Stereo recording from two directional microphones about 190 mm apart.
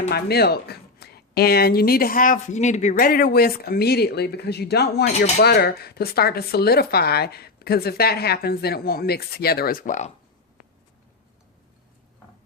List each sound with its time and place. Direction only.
0.1 s speech: 55° left (ahead or behind)